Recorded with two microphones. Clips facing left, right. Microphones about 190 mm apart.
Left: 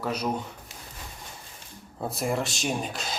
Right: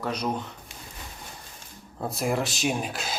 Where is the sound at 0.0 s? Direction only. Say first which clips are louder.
Even; 5° left (ahead or behind).